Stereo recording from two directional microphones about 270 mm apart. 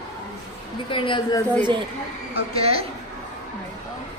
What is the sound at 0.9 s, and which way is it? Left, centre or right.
Speech, centre.